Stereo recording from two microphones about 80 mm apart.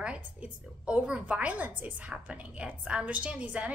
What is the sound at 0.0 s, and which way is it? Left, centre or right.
A woman's voice, centre.